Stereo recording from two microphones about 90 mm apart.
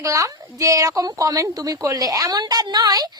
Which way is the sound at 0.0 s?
40° right (ahead or behind).